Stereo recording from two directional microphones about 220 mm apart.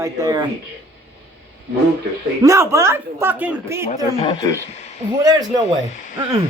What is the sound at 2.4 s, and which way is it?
Speech, 15° right (ahead or behind).